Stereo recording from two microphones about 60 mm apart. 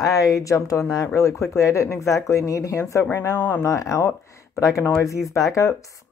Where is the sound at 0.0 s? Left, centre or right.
Left.